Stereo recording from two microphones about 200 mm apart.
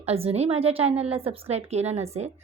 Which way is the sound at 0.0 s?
30° right (ahead or behind).